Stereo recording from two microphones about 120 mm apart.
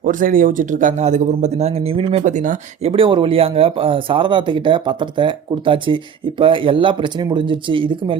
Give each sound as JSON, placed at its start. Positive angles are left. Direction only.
{"t": 0.1, "sound": "speech", "side_deg": -90}
{"t": 2.2, "sound": "speech", "side_deg": -90}
{"t": 2.9, "sound": "speech", "side_deg": -50}